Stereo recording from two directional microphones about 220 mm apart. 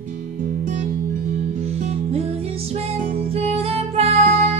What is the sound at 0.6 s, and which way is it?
Music, 35° right (ahead or behind).